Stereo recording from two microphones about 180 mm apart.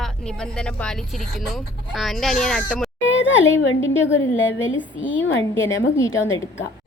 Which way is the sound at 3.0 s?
90° left.